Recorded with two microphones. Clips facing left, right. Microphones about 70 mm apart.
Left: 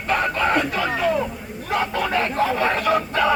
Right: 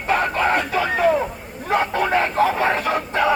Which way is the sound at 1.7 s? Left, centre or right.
Right.